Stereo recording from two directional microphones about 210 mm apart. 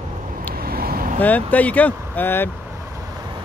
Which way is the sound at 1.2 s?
5° left (ahead or behind).